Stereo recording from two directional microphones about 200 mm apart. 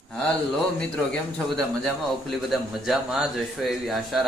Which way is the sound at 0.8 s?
5° left (ahead or behind).